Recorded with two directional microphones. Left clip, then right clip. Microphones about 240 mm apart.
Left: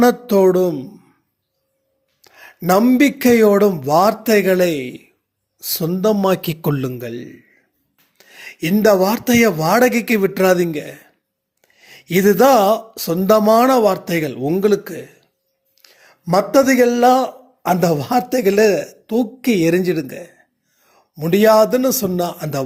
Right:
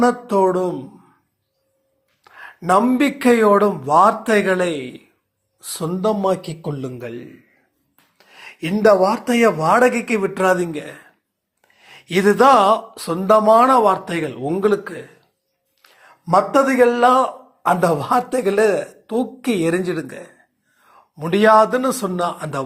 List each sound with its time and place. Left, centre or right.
0.5 s speech: left
2.2 s a man's voice: left